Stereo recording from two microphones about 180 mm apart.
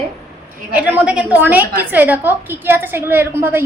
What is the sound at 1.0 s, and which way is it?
A woman's voice, 5° right (ahead or behind).